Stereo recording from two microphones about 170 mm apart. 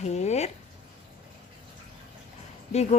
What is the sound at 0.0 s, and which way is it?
Speech, 40° left (ahead or behind).